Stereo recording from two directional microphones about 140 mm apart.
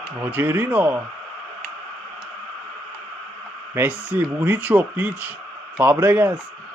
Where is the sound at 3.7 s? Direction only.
15° right (ahead or behind).